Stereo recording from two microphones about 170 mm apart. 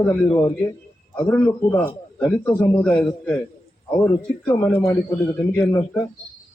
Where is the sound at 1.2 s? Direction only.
10° left (ahead or behind).